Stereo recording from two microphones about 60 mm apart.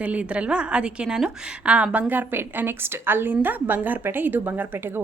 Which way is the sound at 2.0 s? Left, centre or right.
Right.